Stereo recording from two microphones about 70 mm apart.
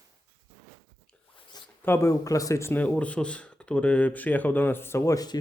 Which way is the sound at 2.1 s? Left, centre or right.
Left.